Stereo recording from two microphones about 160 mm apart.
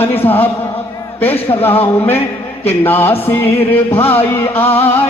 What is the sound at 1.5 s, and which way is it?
Speech, 25° left (ahead or behind).